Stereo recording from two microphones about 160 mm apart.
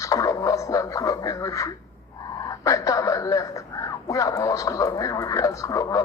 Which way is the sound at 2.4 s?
20° left (ahead or behind).